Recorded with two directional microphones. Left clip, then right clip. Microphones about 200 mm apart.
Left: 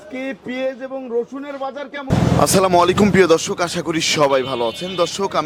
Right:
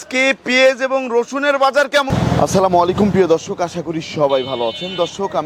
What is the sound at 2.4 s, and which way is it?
Speech, 35° left (ahead or behind).